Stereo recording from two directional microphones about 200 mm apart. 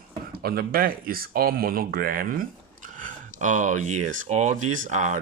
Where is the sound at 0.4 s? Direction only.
50° right (ahead or behind).